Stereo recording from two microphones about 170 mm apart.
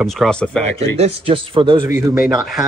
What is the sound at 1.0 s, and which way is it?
Speech, 30° right (ahead or behind).